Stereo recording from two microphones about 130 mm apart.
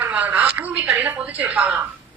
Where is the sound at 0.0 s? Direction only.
10° right (ahead or behind).